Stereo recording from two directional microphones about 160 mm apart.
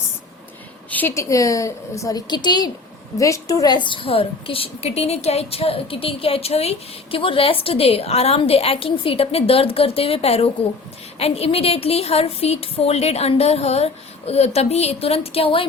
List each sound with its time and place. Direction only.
0.9 s a woman's voice: 10° left (ahead or behind); by 15.6 s 35° left (ahead or behind)